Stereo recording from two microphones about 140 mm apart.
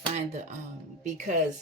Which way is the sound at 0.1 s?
55° right (ahead or behind).